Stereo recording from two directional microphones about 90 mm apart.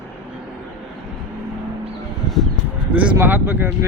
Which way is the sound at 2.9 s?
15° right (ahead or behind).